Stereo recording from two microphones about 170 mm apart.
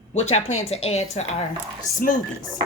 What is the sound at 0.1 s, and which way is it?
Speech, 40° left (ahead or behind).